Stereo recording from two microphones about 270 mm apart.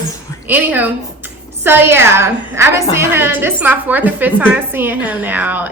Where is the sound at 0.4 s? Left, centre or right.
Centre.